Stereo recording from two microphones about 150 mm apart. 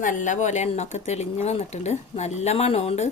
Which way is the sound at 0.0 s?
55° left (ahead or behind).